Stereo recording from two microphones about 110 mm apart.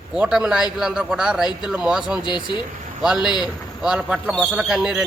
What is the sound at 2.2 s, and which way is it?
Speech, 40° left (ahead or behind).